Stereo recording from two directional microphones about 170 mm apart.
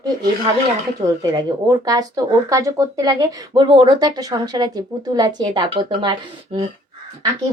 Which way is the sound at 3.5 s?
30° right (ahead or behind).